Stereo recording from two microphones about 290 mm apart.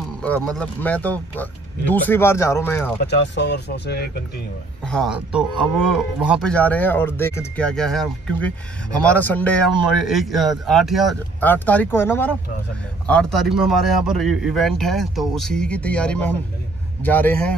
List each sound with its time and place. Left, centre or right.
0.2 s speech: centre
3.0 s speech: left
4.8 s speech: centre